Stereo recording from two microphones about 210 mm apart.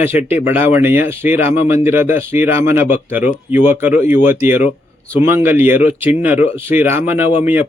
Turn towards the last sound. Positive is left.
turn(degrees=-10)  # may be behind; listen again after turning